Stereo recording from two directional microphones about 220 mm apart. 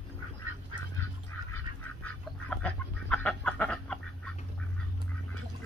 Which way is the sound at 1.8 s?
5° left (ahead or behind).